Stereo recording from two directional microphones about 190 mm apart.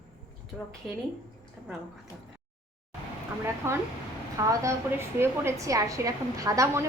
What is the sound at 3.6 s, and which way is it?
A woman's voice, 10° right (ahead or behind).